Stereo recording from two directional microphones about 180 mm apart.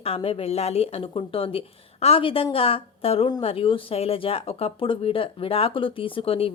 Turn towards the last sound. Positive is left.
turn(degrees=30)  # may be behind; listen again after turning